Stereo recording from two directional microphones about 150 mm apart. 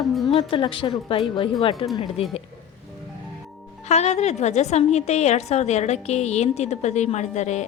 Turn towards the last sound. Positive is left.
turn(degrees=50)  # may be behind; listen again after turning